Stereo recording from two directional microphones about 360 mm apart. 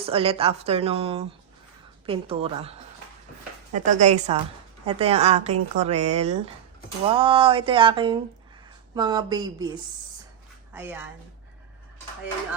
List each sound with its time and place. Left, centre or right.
0.0 s speech: centre
3.7 s chopping: centre
4.9 s speech: centre
10.8 s a woman's voice: centre